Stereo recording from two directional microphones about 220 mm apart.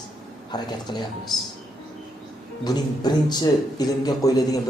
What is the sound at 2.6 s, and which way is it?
A man's voice, 20° left (ahead or behind).